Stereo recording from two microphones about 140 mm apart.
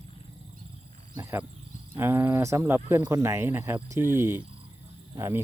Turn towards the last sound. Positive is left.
turn(degrees=-20)  # may be behind; listen again after turning